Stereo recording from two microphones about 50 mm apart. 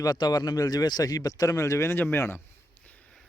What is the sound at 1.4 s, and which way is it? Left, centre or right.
Speech, left.